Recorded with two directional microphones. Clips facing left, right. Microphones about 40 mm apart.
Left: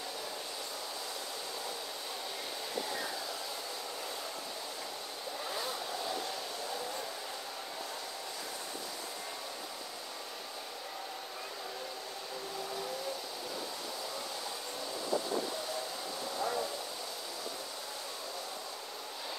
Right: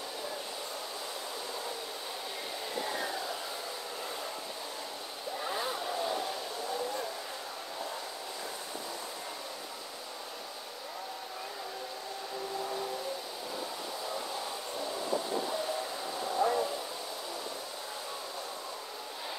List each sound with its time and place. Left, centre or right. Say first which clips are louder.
2.8 s hair dryer: right 4 dB; centre
5.4 s vehicle: right 4 dB; centre
16.3 s a sound: right 6 dB; centre